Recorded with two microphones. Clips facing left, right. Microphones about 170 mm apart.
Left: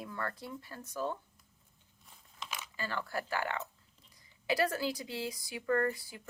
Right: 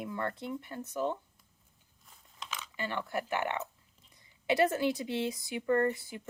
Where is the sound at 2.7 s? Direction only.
20° right (ahead or behind).